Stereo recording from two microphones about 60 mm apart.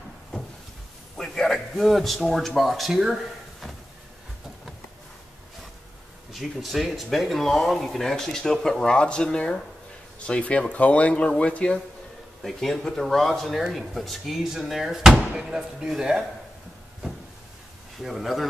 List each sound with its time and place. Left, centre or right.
1.1 s a man's voice: centre
6.3 s speech: centre
12.4 s speech: centre
17.9 s speech: centre